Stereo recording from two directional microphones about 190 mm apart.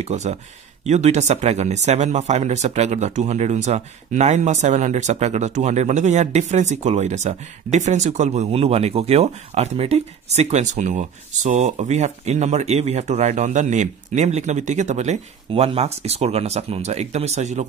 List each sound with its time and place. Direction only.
0.0 s speech: 35° right (ahead or behind)